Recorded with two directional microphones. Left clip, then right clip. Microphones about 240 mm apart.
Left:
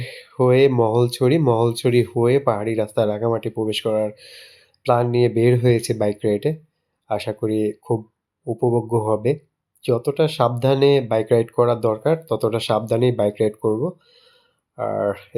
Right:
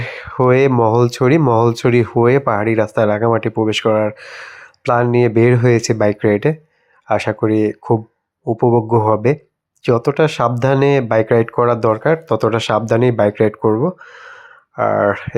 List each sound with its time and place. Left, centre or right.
0.0 s speech: centre